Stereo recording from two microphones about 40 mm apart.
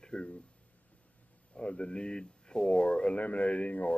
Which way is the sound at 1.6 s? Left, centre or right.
Left.